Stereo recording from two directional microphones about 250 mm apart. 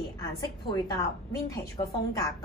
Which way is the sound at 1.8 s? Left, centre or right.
Left.